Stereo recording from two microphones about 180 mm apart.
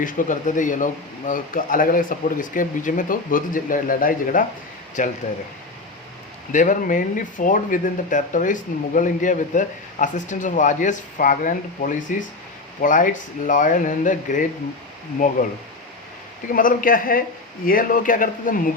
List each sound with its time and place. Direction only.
0.0 s speech: 45° left (ahead or behind)
6.5 s speech: 45° left (ahead or behind)
16.5 s speech: 50° left (ahead or behind)